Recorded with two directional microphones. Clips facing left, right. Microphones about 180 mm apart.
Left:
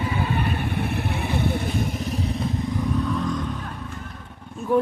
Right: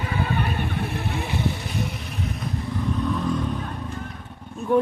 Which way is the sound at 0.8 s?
60° left (ahead or behind).